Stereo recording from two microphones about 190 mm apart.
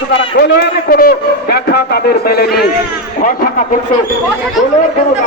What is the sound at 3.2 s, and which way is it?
Speech, 45° left (ahead or behind).